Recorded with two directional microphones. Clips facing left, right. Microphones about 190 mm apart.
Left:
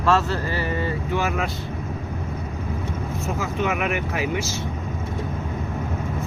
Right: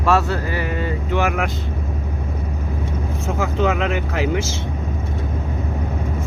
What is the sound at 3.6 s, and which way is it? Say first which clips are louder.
Speech: right 4 dB; 90° right.